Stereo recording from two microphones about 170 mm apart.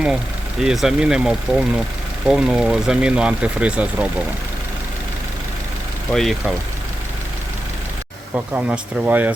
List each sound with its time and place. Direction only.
0.6 s speech: centre (ahead or behind)
6.1 s speech: centre (ahead or behind)
8.3 s speech: 10° right (ahead or behind)